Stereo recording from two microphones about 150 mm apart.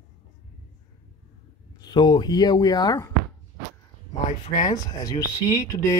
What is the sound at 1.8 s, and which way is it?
Speech, 30° left (ahead or behind).